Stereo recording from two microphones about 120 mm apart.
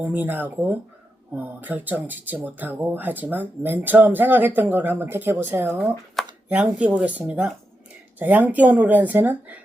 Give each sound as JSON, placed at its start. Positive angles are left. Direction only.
{"t": 0.0, "sound": "speech", "side_deg": -15}
{"t": 6.2, "sound": "a sound", "side_deg": 0}
{"t": 6.5, "sound": "speech", "side_deg": -10}